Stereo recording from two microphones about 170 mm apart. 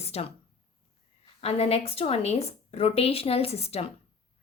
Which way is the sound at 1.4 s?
35° left (ahead or behind).